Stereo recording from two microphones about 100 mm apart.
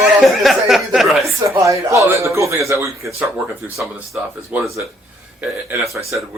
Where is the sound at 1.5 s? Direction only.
30° right (ahead or behind); by 4.7 s 15° right (ahead or behind).